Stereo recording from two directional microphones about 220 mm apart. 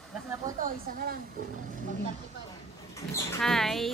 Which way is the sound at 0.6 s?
40° right (ahead or behind).